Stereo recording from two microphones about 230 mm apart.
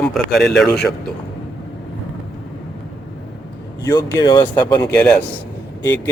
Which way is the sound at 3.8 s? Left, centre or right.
Centre.